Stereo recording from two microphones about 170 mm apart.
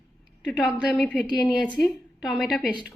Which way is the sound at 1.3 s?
25° left (ahead or behind).